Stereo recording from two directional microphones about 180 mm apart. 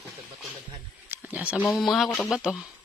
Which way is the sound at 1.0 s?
10° right (ahead or behind).